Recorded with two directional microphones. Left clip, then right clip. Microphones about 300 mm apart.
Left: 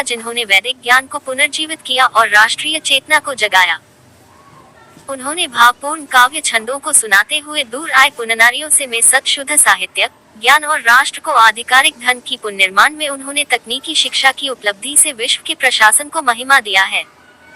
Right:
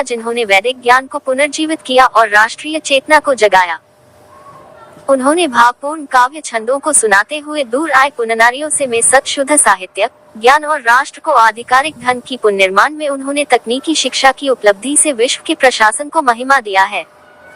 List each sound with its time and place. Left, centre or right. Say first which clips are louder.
0.1 s a woman's voice: right 1 dB; centre
5.1 s a woman's voice: right 6 dB; centre
5.6 s speech: left 1 dB; centre
6.2 s a woman's voice: left 1 dB; centre